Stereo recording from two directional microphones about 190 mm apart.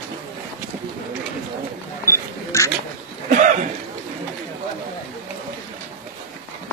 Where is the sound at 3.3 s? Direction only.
40° right (ahead or behind).